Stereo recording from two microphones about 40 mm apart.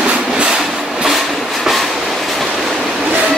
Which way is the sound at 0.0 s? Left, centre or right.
Centre.